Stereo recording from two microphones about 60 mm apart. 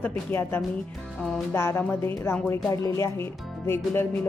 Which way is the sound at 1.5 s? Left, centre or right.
Left.